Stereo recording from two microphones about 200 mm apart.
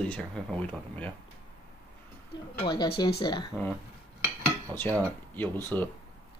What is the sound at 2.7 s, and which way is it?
Speech, 20° left (ahead or behind).